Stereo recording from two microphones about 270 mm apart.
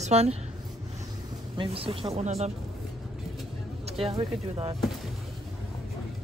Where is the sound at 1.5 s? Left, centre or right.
Right.